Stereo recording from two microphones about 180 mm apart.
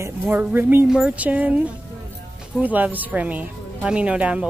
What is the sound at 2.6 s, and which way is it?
Speech, 10° right (ahead or behind).